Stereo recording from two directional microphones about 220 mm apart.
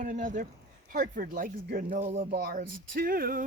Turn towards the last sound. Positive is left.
turn(degrees=-40)  # may be behind; listen again after turning